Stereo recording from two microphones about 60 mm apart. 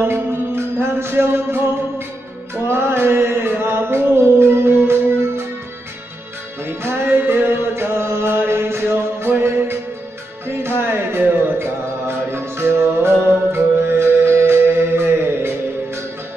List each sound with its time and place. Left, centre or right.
0.0 s music: right
6.6 s music: right
10.6 s music: right